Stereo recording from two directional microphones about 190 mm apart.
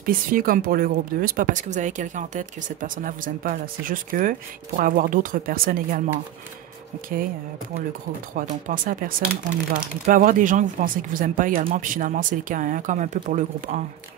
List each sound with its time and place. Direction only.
0.0 s speech: 50° right (ahead or behind)
8.4 s speech: 45° right (ahead or behind)